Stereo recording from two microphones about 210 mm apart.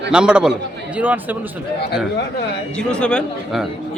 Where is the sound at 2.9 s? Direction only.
5° left (ahead or behind).